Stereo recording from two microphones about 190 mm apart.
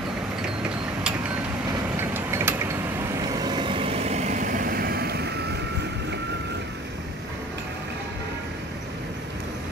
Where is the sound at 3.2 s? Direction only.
20° right (ahead or behind); by 5.3 s 55° right (ahead or behind).